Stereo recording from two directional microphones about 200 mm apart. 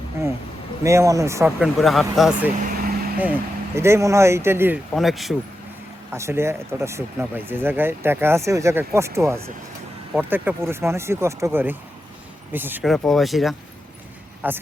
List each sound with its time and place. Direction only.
0.9 s speech: 15° right (ahead or behind)
1.5 s speech: centre (ahead or behind)
2.6 s vehicle: 45° right (ahead or behind)
3.8 s speech: 15° right (ahead or behind)
4.9 s speech: centre (ahead or behind)
6.1 s speech: 15° right (ahead or behind)